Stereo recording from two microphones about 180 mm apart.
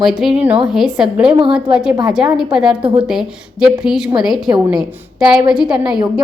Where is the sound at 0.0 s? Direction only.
Centre (ahead or behind).